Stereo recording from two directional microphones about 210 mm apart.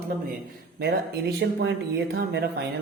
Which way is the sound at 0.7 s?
50° right (ahead or behind).